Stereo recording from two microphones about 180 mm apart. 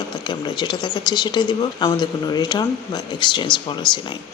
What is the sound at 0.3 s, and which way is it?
Speech, 25° left (ahead or behind).